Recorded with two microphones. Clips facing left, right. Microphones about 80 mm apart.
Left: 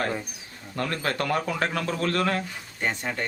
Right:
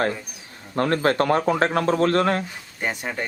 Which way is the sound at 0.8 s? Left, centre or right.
Right.